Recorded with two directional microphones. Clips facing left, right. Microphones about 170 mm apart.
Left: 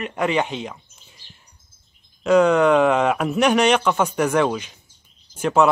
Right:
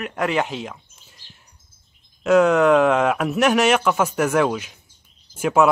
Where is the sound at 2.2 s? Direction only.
Centre (ahead or behind).